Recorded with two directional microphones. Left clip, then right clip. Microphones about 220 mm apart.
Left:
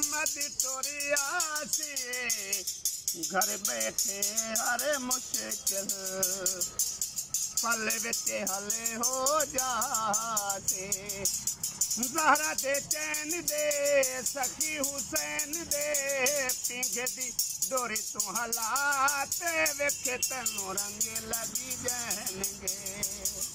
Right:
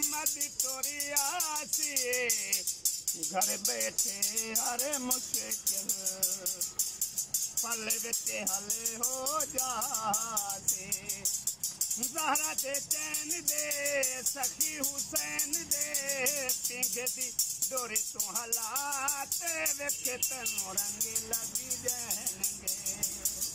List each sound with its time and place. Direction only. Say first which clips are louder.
1.0 s music: left 4 dB; 10° right (ahead or behind)
7.6 s music: left 5 dB; 5° right (ahead or behind)
12.0 s music: left 7 dB; 5° right (ahead or behind)